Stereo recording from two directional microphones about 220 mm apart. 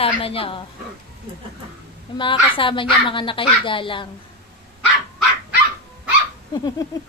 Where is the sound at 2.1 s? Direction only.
25° left (ahead or behind).